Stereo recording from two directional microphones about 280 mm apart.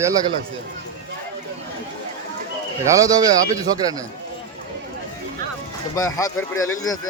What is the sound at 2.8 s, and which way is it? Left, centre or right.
Speech, centre.